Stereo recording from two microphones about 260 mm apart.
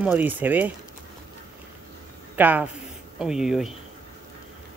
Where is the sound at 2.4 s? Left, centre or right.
Centre.